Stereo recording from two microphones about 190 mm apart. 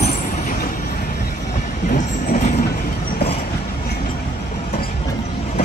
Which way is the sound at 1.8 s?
40° left (ahead or behind).